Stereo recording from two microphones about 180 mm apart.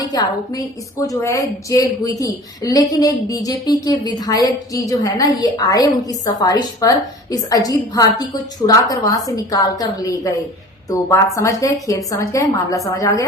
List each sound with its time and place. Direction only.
0.0 s a woman's voice: 20° left (ahead or behind)